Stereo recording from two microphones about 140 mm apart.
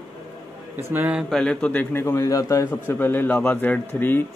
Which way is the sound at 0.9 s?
10° right (ahead or behind).